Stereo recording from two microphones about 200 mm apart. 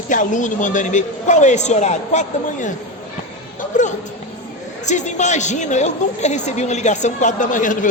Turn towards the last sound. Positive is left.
turn(degrees=40)  # may be behind; listen again after turning